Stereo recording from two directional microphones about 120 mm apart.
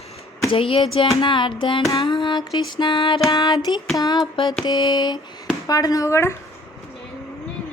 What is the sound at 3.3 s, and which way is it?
A woman's voice, 30° left (ahead or behind).